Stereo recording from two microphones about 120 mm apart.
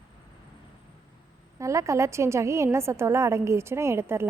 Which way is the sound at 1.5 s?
25° right (ahead or behind).